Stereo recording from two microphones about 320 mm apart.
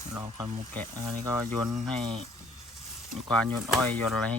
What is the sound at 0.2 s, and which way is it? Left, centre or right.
Speech, centre.